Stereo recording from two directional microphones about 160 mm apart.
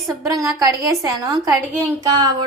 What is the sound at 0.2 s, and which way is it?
A woman's voice, 20° right (ahead or behind).